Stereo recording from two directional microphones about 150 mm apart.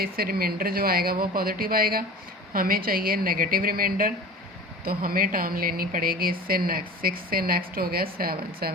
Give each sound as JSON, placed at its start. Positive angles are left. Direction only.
{"t": 0.0, "sound": "a woman's voice", "side_deg": -90}